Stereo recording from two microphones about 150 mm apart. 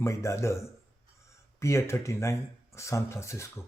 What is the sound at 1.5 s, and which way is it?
Speech, 20° left (ahead or behind).